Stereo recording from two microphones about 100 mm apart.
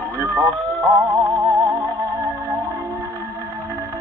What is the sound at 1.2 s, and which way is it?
Music, 35° right (ahead or behind).